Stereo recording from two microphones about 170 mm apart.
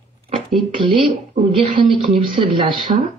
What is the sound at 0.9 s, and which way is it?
Speech, 30° right (ahead or behind).